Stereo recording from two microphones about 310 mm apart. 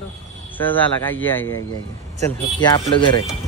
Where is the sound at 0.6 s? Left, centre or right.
Centre.